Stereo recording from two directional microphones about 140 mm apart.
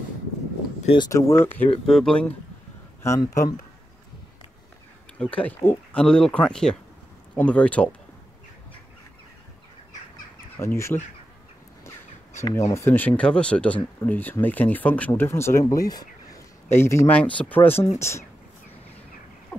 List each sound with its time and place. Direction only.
0.9 s speech: 20° left (ahead or behind)
1.9 s speech: 5° left (ahead or behind)
3.0 s speech: 20° left (ahead or behind)
5.2 s speech: 10° left (ahead or behind)
10.6 s speech: 20° left (ahead or behind)
12.7 s speech: 15° left (ahead or behind)